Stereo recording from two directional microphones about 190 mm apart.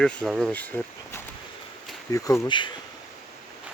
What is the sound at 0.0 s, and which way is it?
Speech, 5° left (ahead or behind).